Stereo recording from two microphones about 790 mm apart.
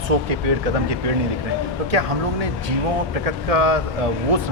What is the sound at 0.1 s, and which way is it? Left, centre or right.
Speech, right.